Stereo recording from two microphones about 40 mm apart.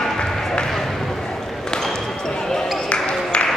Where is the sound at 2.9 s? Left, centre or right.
Left.